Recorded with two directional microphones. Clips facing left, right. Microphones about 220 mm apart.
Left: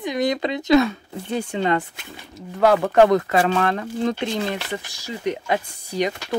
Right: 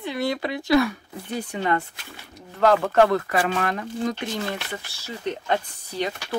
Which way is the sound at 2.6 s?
15° left (ahead or behind).